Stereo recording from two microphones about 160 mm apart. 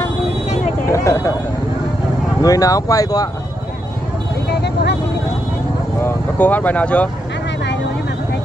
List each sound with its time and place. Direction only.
0.8 s speech: 20° left (ahead or behind)
2.4 s speech: 20° left (ahead or behind)
4.5 s vehicle: 90° left
5.9 s speech: 10° left (ahead or behind)